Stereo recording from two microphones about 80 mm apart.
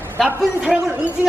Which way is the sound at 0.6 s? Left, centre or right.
Centre.